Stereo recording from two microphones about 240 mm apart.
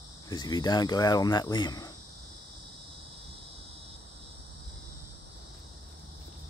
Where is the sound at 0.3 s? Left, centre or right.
Centre.